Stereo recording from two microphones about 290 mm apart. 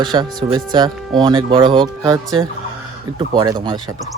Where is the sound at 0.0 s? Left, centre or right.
Centre.